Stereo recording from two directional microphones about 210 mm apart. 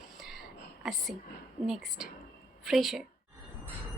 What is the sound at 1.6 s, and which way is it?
A woman's voice, centre (ahead or behind).